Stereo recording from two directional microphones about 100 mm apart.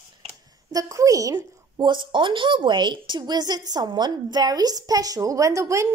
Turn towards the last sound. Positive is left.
turn(degrees=-30)  # may be behind; listen again after turning